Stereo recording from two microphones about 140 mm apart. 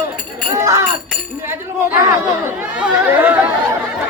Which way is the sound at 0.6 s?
20° right (ahead or behind).